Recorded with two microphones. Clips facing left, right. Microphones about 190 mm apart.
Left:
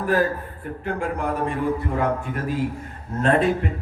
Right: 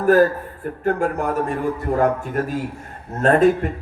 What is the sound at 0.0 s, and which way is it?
A man's voice, 45° right (ahead or behind).